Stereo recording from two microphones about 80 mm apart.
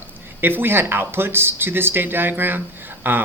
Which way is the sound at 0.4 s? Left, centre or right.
Right.